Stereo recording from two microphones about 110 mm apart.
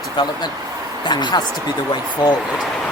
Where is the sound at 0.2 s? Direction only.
40° left (ahead or behind).